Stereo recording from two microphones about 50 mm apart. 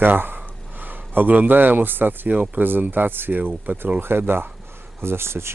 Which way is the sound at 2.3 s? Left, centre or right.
Right.